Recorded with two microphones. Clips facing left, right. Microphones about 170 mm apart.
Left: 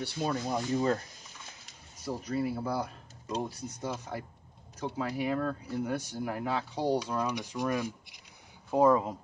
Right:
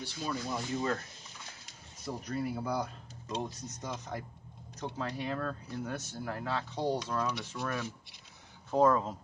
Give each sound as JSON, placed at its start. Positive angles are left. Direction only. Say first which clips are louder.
{"t": 0.0, "sound": "speech", "louder": "left 5 dB", "side_deg": 60}
{"t": 1.7, "sound": "speech", "louder": "left 4 dB", "side_deg": 5}